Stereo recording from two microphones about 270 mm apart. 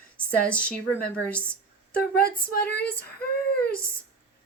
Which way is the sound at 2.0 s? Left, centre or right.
Left.